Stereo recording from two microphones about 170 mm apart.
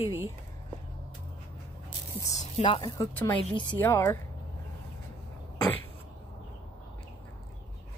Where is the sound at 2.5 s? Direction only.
30° left (ahead or behind); by 4.2 s 15° left (ahead or behind).